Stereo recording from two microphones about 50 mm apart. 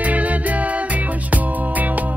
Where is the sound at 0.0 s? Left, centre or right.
Right.